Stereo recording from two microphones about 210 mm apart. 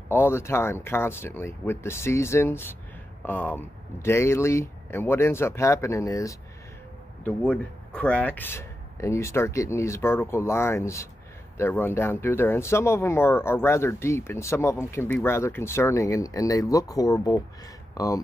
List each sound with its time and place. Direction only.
0.1 s speech: 10° left (ahead or behind)